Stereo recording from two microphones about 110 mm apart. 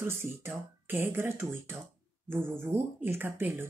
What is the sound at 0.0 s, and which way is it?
Speech, 20° right (ahead or behind).